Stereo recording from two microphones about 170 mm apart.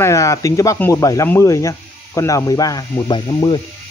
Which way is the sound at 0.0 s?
20° left (ahead or behind).